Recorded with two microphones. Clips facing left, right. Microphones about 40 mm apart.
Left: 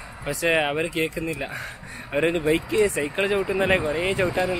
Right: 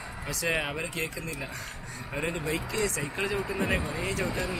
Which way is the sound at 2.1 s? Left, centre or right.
Left.